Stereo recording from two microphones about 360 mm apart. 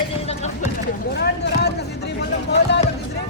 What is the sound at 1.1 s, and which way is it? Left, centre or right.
Speech, left.